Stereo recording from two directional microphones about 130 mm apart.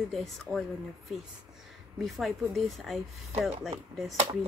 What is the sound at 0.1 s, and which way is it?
Speech, centre (ahead or behind).